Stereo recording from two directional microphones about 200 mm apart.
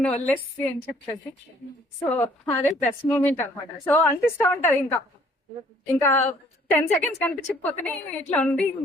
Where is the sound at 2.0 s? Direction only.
10° left (ahead or behind).